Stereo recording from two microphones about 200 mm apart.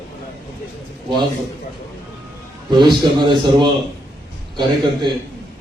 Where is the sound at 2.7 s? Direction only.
20° right (ahead or behind).